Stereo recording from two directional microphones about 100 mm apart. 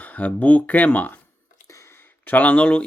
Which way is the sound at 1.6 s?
30° left (ahead or behind).